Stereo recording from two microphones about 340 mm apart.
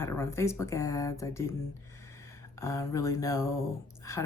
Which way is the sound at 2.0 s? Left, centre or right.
Centre.